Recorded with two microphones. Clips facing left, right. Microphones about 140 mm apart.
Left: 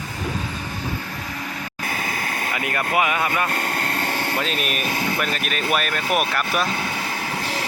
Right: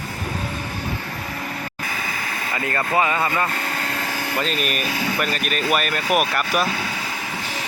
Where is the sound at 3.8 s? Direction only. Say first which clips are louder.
Left 2 dB; 55° left (ahead or behind).